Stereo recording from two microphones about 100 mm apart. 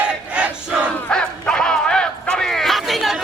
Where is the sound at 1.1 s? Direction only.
10° left (ahead or behind).